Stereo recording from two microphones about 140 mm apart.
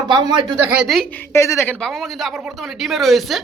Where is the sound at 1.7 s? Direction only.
Centre (ahead or behind).